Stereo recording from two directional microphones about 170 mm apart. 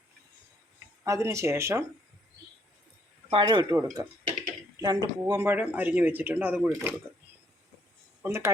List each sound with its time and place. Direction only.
1.0 s speech: 15° right (ahead or behind)
3.2 s speech: 30° right (ahead or behind); by 6.9 s 10° right (ahead or behind)
8.2 s speech: 15° right (ahead or behind)